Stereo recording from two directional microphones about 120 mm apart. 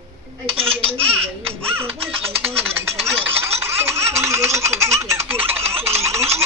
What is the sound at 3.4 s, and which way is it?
Laughter, 20° right (ahead or behind).